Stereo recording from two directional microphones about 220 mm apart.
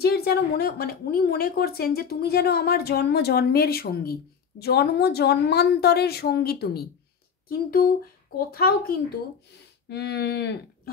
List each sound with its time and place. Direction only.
0.0 s a woman's voice: 45° left (ahead or behind)